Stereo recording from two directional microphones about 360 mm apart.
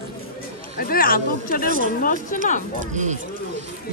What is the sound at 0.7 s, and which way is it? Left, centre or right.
Speech, left.